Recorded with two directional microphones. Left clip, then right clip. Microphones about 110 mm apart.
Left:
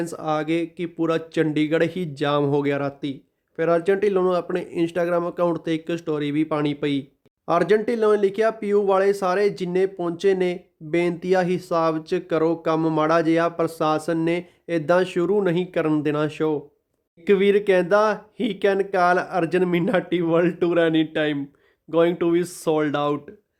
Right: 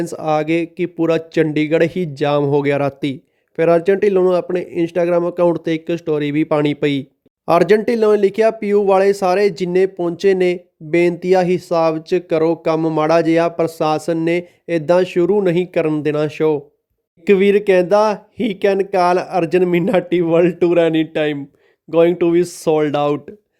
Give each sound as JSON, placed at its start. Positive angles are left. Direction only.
{"t": 0.0, "sound": "speech", "side_deg": -50}
{"t": 2.6, "sound": "speech", "side_deg": -70}
{"t": 7.9, "sound": "speech", "side_deg": -55}